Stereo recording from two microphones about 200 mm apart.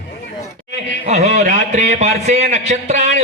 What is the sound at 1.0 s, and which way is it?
A man's voice, 35° right (ahead or behind).